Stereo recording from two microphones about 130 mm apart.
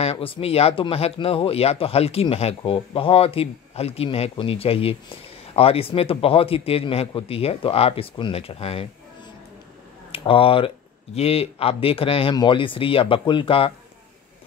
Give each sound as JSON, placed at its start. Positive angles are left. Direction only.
{"t": 0.0, "sound": "speech", "side_deg": 45}
{"t": 10.1, "sound": "speech", "side_deg": 45}